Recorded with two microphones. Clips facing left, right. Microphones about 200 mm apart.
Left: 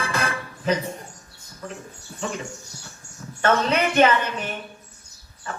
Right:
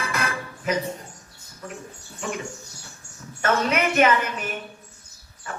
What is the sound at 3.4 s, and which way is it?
A woman's voice, 30° left (ahead or behind).